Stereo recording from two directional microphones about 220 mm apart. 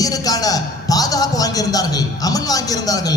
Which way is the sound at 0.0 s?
15° left (ahead or behind).